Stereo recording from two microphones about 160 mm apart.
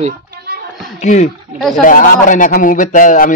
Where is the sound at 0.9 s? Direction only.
50° left (ahead or behind).